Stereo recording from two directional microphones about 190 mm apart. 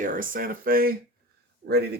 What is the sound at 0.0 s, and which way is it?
Speech, 45° right (ahead or behind).